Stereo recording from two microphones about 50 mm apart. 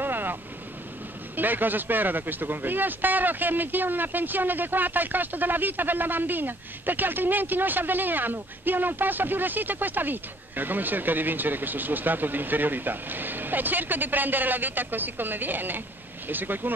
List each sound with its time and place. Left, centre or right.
0.0 s boat: right
1.3 s speech: right